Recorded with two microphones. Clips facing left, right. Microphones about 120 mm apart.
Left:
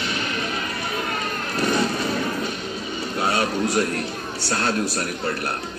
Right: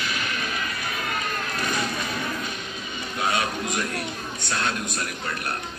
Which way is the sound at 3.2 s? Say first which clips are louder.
Left 4 dB; 30° left (ahead or behind).